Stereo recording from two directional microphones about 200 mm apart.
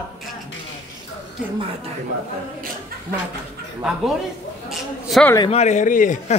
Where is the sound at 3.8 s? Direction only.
5° right (ahead or behind).